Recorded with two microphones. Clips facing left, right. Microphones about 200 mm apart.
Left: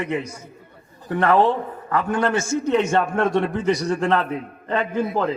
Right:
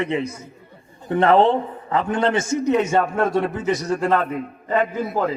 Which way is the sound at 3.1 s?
5° right (ahead or behind).